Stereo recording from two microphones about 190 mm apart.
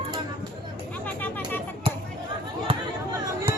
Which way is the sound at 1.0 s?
10° left (ahead or behind).